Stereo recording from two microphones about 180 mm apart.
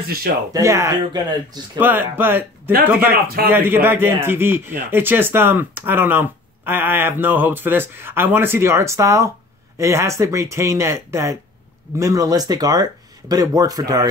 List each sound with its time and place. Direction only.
0.0 s speech: 55° right (ahead or behind)
0.5 s speech: 15° right (ahead or behind)
1.8 s a man's voice: 10° right (ahead or behind)